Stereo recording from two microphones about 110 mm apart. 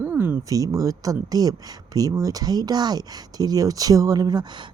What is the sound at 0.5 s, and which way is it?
Speech, 35° right (ahead or behind).